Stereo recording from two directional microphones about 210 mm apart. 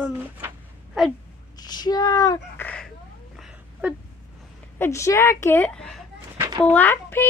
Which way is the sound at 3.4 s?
5° right (ahead or behind).